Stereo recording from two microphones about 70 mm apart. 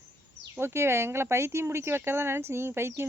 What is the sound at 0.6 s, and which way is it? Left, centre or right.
Speech, right.